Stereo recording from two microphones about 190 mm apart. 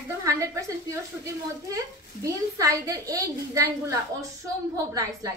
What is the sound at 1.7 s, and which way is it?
A woman's voice, 15° right (ahead or behind).